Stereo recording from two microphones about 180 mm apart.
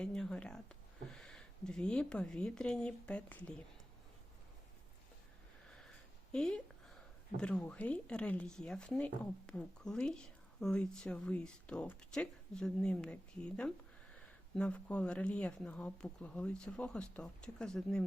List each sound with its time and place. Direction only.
0.0 s speech: 5° left (ahead or behind)
5.6 s sniff: 5° left (ahead or behind)
6.3 s a woman's voice: 5° left (ahead or behind)